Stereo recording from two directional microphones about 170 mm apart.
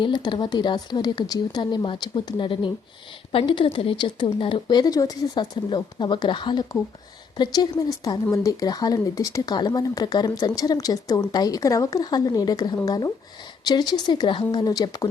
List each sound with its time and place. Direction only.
0.0 s speech: 25° left (ahead or behind)